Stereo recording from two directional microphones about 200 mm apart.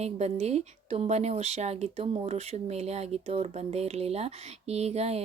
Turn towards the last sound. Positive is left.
turn(degrees=-30)  # may be behind; listen again after turning